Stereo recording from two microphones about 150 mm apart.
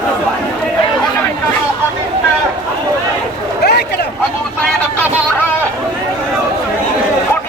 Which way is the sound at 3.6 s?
90° left.